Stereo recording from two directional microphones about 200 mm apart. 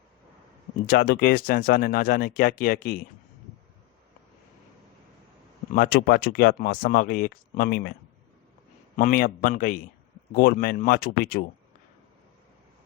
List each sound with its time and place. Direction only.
0.9 s speech: 50° left (ahead or behind)
5.7 s speech: 50° left (ahead or behind)
9.0 s speech: 45° left (ahead or behind)